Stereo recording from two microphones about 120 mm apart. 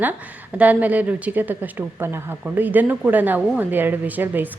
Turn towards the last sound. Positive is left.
turn(degrees=-15)  # may be behind; listen again after turning